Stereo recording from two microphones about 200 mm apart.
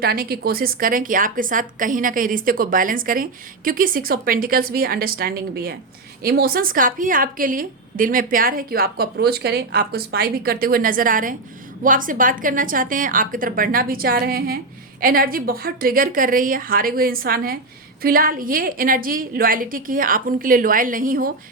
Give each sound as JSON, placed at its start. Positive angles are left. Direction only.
{"t": 0.0, "sound": "a woman's voice", "side_deg": -50}